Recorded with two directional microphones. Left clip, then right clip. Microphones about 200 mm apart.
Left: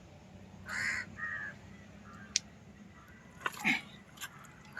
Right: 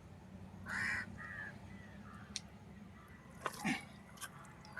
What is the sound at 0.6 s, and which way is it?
Duck, 50° left (ahead or behind).